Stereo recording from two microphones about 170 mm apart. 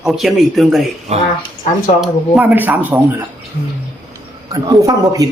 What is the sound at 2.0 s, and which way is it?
Speech, 5° right (ahead or behind).